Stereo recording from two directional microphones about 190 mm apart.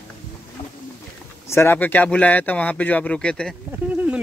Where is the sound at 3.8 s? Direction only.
5° right (ahead or behind).